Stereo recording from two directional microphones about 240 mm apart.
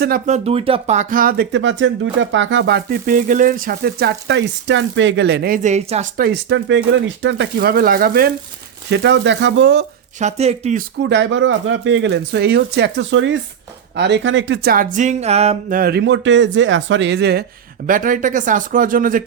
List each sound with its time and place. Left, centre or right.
0.0 s speech: right
8.9 s speech: right
10.2 s music: right
11.1 s speech: right
14.9 s music: right
15.8 s speech: right